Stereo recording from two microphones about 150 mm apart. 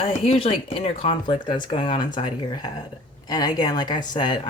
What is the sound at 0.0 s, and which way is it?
A woman's voice, 40° left (ahead or behind).